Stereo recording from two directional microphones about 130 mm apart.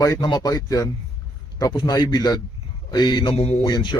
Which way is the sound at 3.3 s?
50° left (ahead or behind).